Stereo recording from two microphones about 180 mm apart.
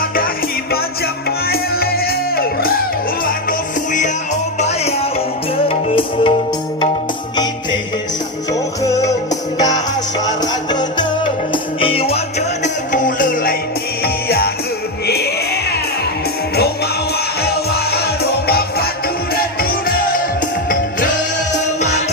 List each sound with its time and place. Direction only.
1.5 s music: 60° left (ahead or behind)
4.6 s music: 35° left (ahead or behind)
8.8 s music: 20° left (ahead or behind)
12.6 s music: 45° left (ahead or behind); by 15.3 s 60° left (ahead or behind)
17.4 s music: 60° left (ahead or behind)
21.8 s music: 40° left (ahead or behind)